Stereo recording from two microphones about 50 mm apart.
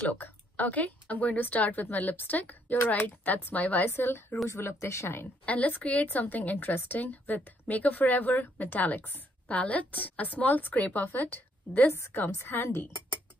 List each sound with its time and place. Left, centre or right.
0.1 s a woman's voice: left
3.9 s a woman's voice: left
4.5 s speech: left
5.4 s a woman's voice: left
9.6 s a woman's voice: left